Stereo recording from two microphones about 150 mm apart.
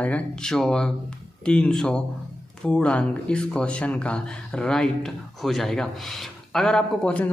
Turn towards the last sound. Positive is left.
turn(degrees=10)  # may be behind; listen again after turning